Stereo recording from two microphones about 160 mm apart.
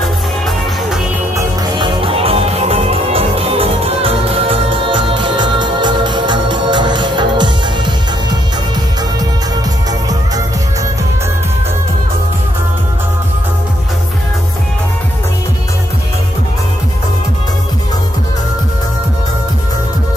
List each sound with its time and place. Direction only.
1.8 s music: 35° right (ahead or behind)